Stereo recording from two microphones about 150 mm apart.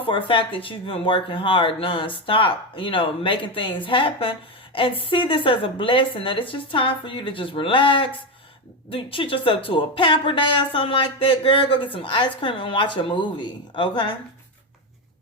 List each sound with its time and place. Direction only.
0.0 s speech: 35° left (ahead or behind)